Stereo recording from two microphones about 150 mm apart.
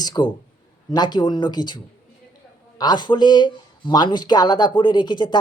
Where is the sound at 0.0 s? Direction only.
30° left (ahead or behind).